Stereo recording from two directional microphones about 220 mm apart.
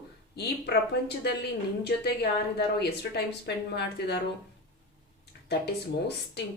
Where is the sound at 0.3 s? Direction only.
50° left (ahead or behind).